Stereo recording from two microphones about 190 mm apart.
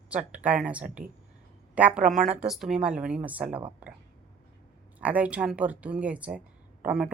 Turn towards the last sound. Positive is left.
turn(degrees=-5)  # may be behind; listen again after turning